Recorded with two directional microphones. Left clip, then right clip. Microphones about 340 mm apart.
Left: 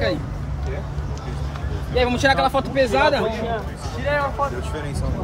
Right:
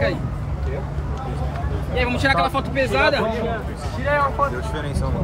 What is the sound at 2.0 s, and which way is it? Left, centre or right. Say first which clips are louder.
Speech: left 2 dB; left.